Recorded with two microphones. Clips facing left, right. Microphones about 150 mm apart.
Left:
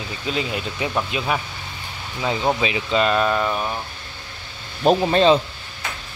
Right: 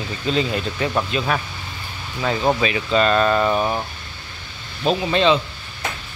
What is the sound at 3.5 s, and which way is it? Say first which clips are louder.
Speech: right 5 dB; 25° right (ahead or behind).